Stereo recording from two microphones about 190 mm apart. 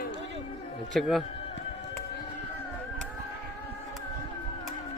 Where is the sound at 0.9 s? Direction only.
Centre (ahead or behind).